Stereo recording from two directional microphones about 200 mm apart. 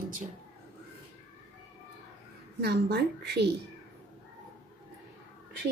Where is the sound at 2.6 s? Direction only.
55° right (ahead or behind).